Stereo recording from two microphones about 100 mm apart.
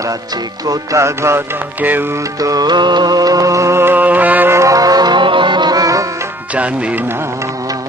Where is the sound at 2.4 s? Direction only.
40° right (ahead or behind).